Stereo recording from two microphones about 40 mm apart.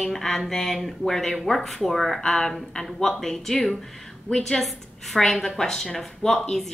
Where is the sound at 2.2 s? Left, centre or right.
Centre.